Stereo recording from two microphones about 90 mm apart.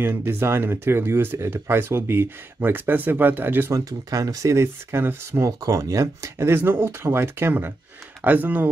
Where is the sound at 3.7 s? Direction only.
40° right (ahead or behind).